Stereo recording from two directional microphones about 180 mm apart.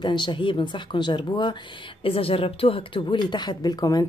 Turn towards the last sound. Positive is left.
turn(degrees=20)  # may be behind; listen again after turning